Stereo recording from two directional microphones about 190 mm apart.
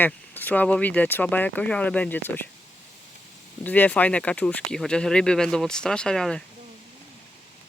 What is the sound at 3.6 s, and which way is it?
Speech, 10° left (ahead or behind).